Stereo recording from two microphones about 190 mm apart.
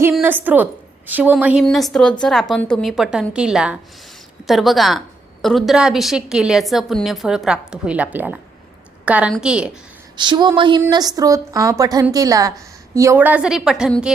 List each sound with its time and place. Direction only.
0.1 s a woman's voice: 10° right (ahead or behind)
10.2 s a woman's voice: 25° right (ahead or behind); by 14.1 s 5° right (ahead or behind)